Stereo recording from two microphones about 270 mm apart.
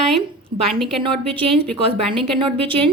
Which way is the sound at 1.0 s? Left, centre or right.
Centre.